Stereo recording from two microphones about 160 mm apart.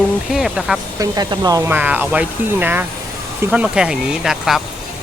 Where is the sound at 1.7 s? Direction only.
10° right (ahead or behind).